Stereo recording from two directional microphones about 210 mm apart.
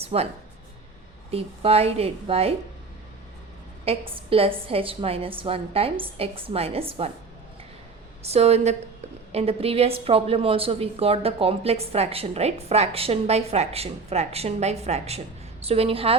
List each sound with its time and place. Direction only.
0.0 s speech: 30° right (ahead or behind)
1.3 s a woman's voice: 30° right (ahead or behind)
3.8 s a woman's voice: 25° right (ahead or behind)
8.2 s a woman's voice: 30° right (ahead or behind)